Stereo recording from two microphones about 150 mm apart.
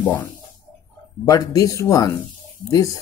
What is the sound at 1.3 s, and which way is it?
Speech, 25° left (ahead or behind).